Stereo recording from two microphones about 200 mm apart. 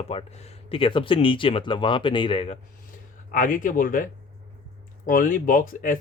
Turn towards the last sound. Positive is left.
turn(degrees=45)  # may be behind; listen again after turning